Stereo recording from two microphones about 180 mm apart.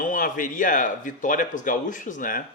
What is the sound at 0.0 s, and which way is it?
Speech, 50° left (ahead or behind).